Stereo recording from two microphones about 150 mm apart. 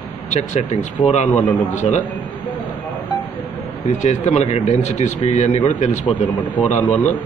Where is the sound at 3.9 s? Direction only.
55° left (ahead or behind).